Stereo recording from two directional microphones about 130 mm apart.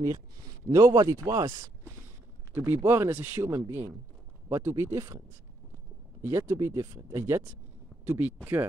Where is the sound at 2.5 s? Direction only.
20° right (ahead or behind).